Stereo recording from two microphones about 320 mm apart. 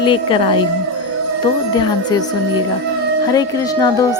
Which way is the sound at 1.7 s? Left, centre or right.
Centre.